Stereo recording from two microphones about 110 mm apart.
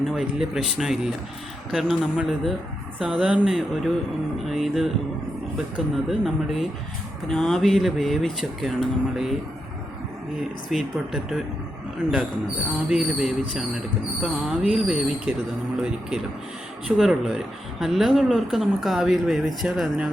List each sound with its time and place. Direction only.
0.0 s a woman's voice: 5° right (ahead or behind)
10.7 s a woman's voice: centre (ahead or behind)
12.9 s a woman's voice: 5° right (ahead or behind)
15.3 s speech: 15° right (ahead or behind)
15.8 s a woman's voice: 5° right (ahead or behind)